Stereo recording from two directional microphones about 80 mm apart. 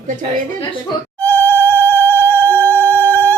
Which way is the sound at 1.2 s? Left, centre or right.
Left.